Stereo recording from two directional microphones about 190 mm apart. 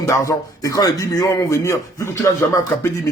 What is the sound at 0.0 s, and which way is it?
A man's voice, 15° left (ahead or behind).